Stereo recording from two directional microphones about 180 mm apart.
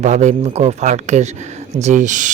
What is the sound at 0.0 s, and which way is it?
Speech, 40° right (ahead or behind).